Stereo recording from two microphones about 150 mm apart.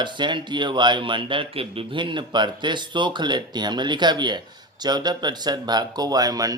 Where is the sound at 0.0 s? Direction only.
30° right (ahead or behind).